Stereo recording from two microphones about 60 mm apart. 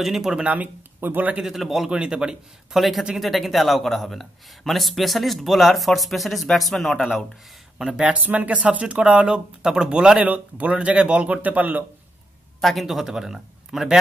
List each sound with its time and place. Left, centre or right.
0.0 s speech: centre
0.5 s speech: right
1.4 s speech: centre
1.9 s speech: centre
2.8 s speech: centre
8.0 s speech: right
10.2 s speech: right
12.5 s speech: centre